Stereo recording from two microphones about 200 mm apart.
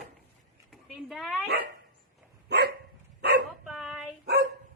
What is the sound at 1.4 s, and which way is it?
Dog, 55° right (ahead or behind).